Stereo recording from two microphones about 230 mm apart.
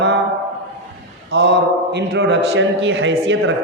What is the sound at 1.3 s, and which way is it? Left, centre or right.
A man's voice, right.